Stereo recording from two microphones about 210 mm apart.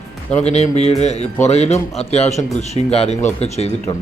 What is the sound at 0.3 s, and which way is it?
Speech, 30° left (ahead or behind).